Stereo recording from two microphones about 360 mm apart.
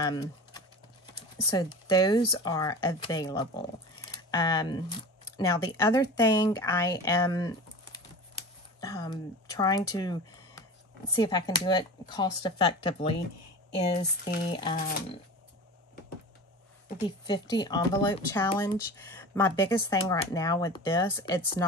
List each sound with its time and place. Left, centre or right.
0.0 s typing: centre
1.5 s speech: centre
14.5 s speech: centre
14.8 s speech: left
17.0 s speech: centre